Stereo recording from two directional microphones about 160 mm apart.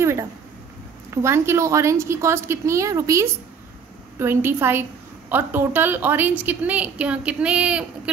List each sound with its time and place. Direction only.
0.0 s a woman's voice: 15° right (ahead or behind)